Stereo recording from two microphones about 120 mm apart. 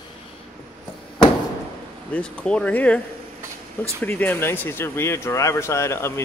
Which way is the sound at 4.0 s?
15° left (ahead or behind).